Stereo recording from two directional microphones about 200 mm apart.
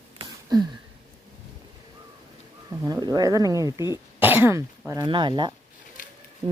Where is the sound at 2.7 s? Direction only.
15° right (ahead or behind).